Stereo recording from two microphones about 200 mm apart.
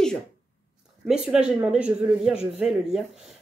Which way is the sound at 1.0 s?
5° right (ahead or behind).